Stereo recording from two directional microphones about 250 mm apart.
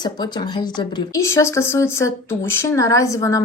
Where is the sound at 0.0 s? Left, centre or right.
Centre.